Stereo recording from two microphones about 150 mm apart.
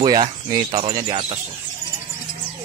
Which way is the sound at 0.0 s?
25° right (ahead or behind).